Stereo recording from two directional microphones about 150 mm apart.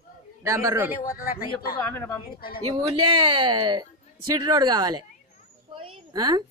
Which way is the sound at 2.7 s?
30° right (ahead or behind).